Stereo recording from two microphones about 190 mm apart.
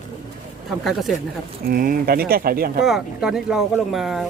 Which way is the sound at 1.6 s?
50° right (ahead or behind).